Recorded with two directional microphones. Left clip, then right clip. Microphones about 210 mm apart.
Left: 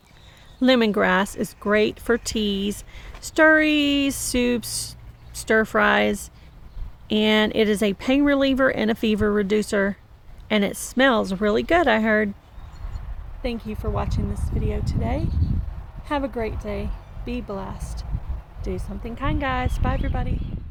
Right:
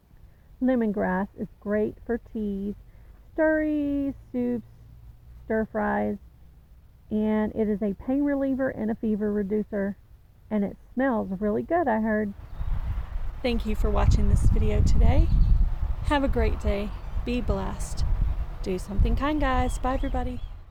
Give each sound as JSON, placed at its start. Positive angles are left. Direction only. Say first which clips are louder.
{"t": 0.6, "sound": "speech", "louder": "left 7 dB", "side_deg": 20}
{"t": 13.4, "sound": "speech", "louder": "right 1 dB", "side_deg": -5}